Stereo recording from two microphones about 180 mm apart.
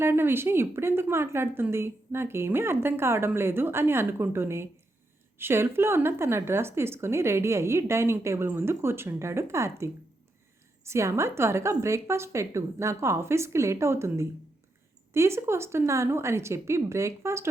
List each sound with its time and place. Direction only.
0.0 s speech: 15° right (ahead or behind)